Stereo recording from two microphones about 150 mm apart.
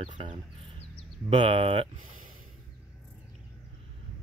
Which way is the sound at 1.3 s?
35° right (ahead or behind).